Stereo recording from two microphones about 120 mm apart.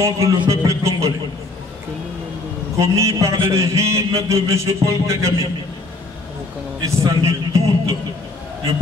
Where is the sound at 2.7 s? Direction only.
25° right (ahead or behind).